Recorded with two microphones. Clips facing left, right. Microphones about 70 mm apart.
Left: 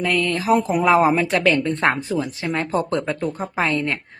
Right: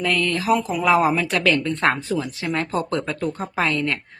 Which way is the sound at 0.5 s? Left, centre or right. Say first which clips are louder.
Left 3 dB; left.